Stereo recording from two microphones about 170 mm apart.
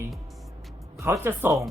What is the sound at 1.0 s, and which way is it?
Speech, 15° right (ahead or behind).